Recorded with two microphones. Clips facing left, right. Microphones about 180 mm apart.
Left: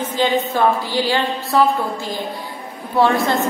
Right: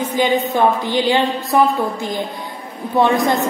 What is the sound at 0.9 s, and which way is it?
Speech, 20° right (ahead or behind).